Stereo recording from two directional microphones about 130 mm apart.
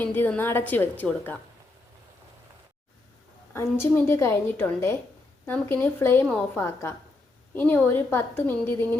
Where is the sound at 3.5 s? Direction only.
20° left (ahead or behind).